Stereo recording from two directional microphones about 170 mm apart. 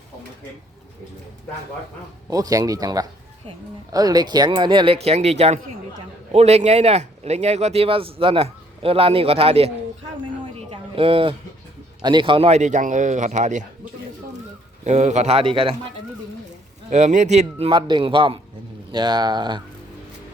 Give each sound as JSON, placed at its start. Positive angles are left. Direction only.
{"t": 2.3, "sound": "speech", "side_deg": -20}
{"t": 10.7, "sound": "a sound", "side_deg": -35}
{"t": 12.0, "sound": "speech", "side_deg": -30}
{"t": 14.8, "sound": "speech", "side_deg": -40}
{"t": 16.9, "sound": "speech", "side_deg": -45}
{"t": 17.7, "sound": "speech", "side_deg": -25}